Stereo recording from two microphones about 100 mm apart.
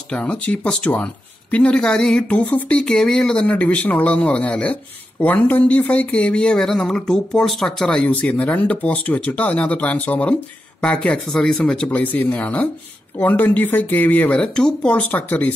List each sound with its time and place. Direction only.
0.1 s speech: 10° left (ahead or behind)